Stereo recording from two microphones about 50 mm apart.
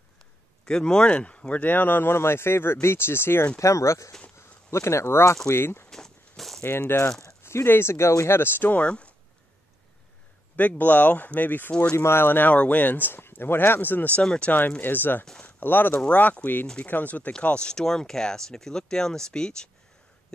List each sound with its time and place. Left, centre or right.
0.7 s speech: centre; by 3.4 s left
3.5 s speech: left
4.4 s speech: left
5.5 s speech: left
5.9 s walk: centre
7.0 s speech: left
8.7 s speech: left
10.8 s speech: left
11.7 s speech: left
12.0 s speech: left
12.5 s speech: left
14.2 s speech: centre
14.8 s speech: left; by 19.7 s centre